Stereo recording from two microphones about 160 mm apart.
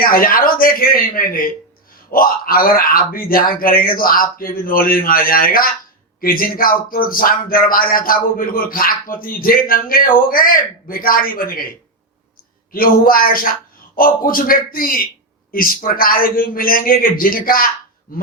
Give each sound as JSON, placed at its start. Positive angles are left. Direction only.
{"t": 0.0, "sound": "speech", "side_deg": 65}
{"t": 12.7, "sound": "speech", "side_deg": 65}